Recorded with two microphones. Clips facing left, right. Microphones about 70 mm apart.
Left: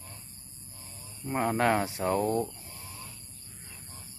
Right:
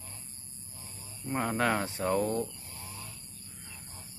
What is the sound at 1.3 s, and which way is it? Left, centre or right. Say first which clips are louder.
Speech: left 3 dB; centre.